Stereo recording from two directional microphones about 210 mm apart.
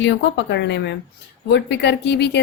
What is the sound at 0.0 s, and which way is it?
A woman's voice, 55° left (ahead or behind).